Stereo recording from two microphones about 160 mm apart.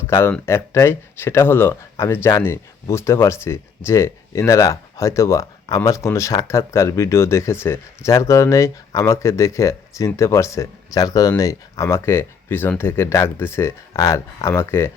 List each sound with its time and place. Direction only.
0.1 s speech: 15° left (ahead or behind)